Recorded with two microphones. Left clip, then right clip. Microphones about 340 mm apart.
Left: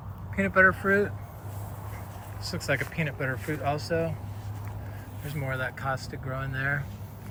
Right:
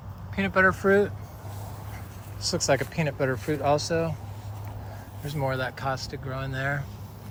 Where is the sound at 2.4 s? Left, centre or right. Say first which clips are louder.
Right 5 dB; centre.